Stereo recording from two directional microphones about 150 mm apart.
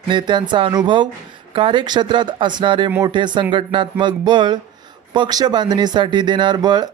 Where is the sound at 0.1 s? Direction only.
30° right (ahead or behind).